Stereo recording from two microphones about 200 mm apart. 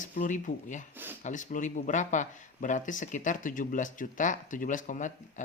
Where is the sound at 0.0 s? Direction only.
40° left (ahead or behind).